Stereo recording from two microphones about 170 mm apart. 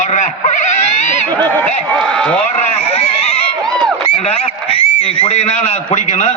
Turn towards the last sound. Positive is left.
turn(degrees=40)  # may be behind; listen again after turning